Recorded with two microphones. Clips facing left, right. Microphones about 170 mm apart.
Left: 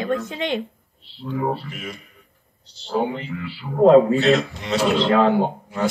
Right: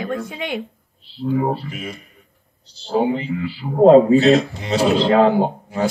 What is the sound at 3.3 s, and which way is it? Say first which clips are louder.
A man's voice: right 1 dB; 40° right (ahead or behind).